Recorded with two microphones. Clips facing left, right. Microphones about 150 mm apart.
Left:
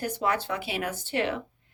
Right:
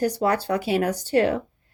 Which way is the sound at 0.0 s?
40° right (ahead or behind).